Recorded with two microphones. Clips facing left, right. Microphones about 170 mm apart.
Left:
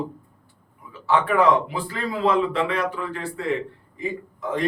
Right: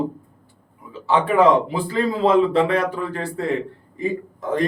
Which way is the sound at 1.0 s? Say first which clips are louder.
Right 3 dB; 25° right (ahead or behind).